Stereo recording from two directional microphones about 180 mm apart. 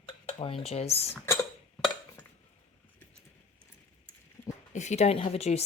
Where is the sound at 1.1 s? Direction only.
15° left (ahead or behind).